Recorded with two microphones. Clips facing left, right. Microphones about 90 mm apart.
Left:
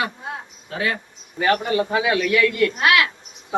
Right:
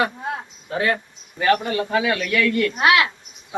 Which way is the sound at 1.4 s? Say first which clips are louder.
Even; 10° left (ahead or behind).